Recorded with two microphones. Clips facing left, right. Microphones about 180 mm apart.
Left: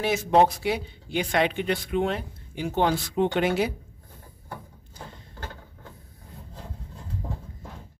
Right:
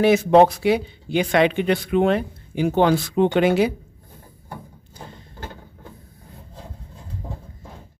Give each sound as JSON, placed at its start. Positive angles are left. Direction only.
{"t": 0.0, "sound": "speech", "side_deg": -70}